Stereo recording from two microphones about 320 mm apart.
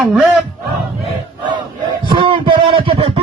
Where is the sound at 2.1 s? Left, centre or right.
Centre.